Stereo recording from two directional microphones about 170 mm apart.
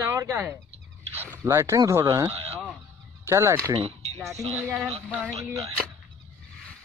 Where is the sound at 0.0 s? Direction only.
15° right (ahead or behind).